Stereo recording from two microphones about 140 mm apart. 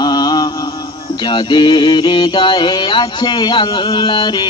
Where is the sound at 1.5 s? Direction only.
30° left (ahead or behind).